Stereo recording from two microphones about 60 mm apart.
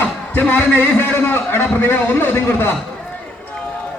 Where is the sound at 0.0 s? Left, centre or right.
Left.